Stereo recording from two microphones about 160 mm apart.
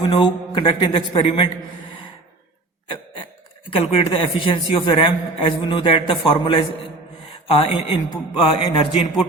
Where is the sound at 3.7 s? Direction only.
30° left (ahead or behind).